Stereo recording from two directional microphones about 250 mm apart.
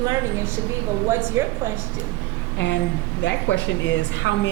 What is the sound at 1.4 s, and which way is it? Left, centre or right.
Speech, centre.